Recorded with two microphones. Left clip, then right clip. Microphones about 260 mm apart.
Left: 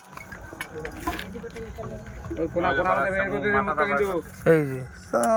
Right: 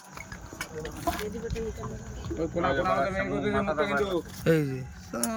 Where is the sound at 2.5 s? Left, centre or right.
Centre.